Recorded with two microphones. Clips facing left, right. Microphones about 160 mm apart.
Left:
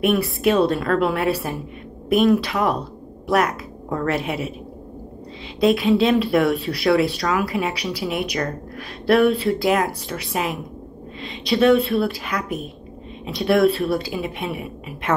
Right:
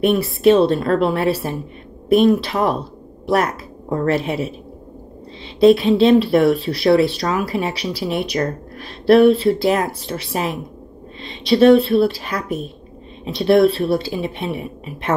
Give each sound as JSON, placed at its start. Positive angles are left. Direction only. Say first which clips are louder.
{"t": 0.0, "sound": "a woman's voice", "louder": "right 4 dB", "side_deg": -30}
{"t": 5.6, "sound": "a woman's voice", "louder": "right 5 dB", "side_deg": -30}